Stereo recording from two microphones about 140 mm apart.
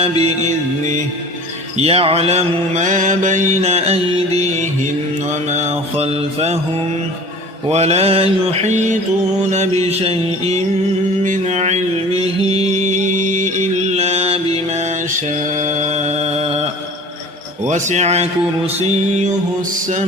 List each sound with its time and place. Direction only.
0.0 s speech: 50° right (ahead or behind)
1.8 s mantra: 45° right (ahead or behind)
7.7 s mantra: 50° right (ahead or behind)
9.8 s mantra: 45° right (ahead or behind)
11.2 s music: 60° right (ahead or behind)
12.8 s mantra: 60° right (ahead or behind)
15.6 s mantra: 60° right (ahead or behind)
17.7 s speech: 60° right (ahead or behind)